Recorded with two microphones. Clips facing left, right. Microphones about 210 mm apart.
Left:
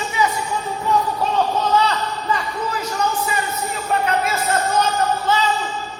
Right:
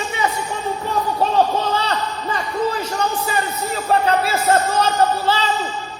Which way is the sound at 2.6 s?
30° right (ahead or behind).